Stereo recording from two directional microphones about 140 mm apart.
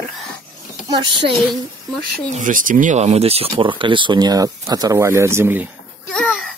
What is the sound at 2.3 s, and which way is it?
Speech, 70° right (ahead or behind).